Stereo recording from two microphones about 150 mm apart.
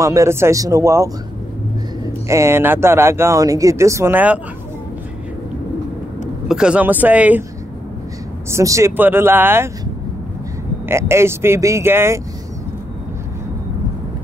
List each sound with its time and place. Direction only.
0.0 s speech: 20° right (ahead or behind)
2.2 s speech: 20° right (ahead or behind)
6.5 s speech: 5° right (ahead or behind)
8.5 s speech: 20° right (ahead or behind)
10.9 s speech: 15° right (ahead or behind)